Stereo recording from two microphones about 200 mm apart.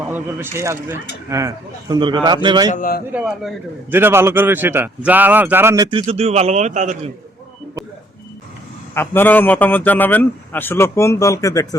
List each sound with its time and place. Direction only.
0.0 s a man's voice: 10° right (ahead or behind)
2.6 s a man's voice: 40° left (ahead or behind)
3.1 s a man's voice: 5° right (ahead or behind); by 7.1 s 35° right (ahead or behind)
9.0 s a man's voice: 10° left (ahead or behind)